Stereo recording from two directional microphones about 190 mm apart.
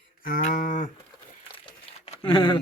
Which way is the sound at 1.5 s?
25° left (ahead or behind).